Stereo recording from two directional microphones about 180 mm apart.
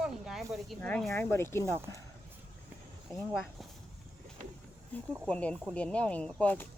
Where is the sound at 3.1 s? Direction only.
Centre (ahead or behind).